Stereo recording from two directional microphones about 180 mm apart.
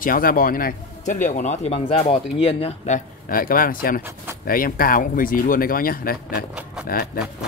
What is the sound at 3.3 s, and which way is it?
A man's voice, 50° left (ahead or behind).